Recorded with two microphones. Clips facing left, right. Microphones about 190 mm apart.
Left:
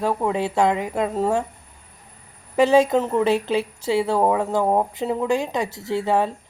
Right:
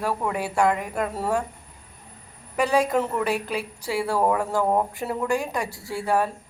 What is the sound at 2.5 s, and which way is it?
A woman's voice, 25° left (ahead or behind).